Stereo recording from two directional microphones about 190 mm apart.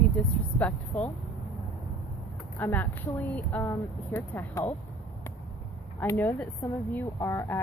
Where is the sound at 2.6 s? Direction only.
10° left (ahead or behind).